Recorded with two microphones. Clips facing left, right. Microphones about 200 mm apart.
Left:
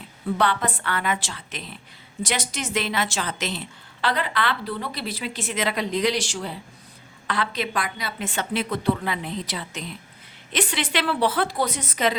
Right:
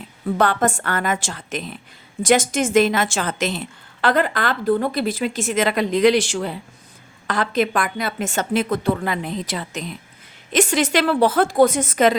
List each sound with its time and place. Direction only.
0.3 s a woman's voice: 45° right (ahead or behind)